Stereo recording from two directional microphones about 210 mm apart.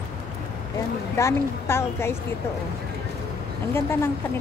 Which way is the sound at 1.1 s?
15° left (ahead or behind).